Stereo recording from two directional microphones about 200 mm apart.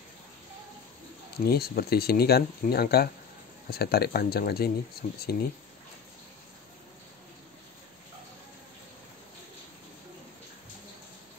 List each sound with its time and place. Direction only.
1.4 s speech: 50° left (ahead or behind)